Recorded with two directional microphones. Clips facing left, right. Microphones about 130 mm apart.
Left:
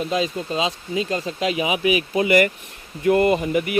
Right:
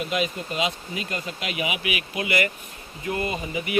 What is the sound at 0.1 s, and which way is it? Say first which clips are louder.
Speech: left 4 dB; 30° left (ahead or behind).